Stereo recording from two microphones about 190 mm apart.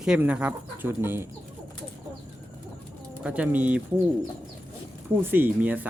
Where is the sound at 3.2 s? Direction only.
10° right (ahead or behind).